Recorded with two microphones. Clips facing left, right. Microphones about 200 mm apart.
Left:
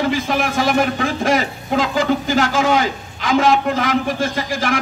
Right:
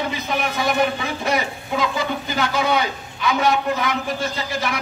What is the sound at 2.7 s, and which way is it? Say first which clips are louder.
A man's voice: left 4 dB; 90° left.